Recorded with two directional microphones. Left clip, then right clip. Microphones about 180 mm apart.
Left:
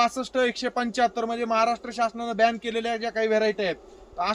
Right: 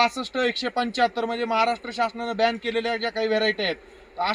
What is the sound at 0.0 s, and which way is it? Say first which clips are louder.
A man's voice: right 1 dB; 15° left (ahead or behind).